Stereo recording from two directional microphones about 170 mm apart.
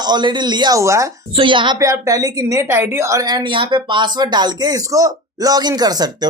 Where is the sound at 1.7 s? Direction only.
20° right (ahead or behind).